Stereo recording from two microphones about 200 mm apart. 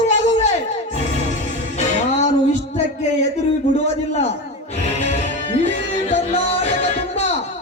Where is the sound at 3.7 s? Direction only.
35° left (ahead or behind).